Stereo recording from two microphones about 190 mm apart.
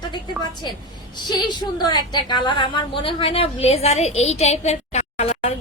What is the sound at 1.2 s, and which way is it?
A woman's voice, 25° left (ahead or behind).